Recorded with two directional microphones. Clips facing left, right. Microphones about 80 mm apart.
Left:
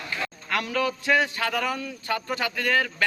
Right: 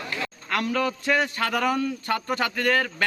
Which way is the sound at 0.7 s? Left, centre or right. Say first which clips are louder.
Left 2 dB; right.